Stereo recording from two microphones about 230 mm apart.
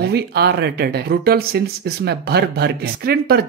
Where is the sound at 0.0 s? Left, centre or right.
Right.